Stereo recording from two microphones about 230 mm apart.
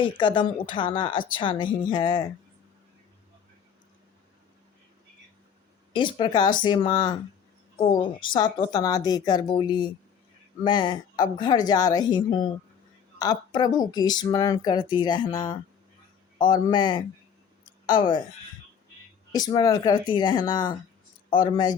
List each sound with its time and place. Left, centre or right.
0.0 s a woman's voice: left
5.9 s a woman's voice: left
19.3 s speech: centre